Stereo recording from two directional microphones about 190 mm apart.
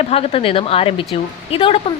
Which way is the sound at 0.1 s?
30° left (ahead or behind).